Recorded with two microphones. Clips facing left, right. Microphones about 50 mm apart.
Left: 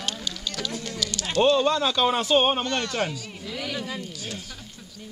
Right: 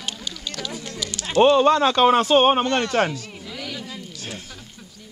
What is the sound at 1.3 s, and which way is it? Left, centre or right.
Speech, right.